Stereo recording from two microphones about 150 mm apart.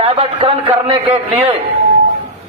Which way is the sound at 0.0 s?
40° right (ahead or behind).